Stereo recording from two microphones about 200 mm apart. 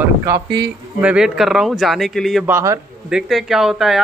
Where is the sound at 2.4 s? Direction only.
15° right (ahead or behind).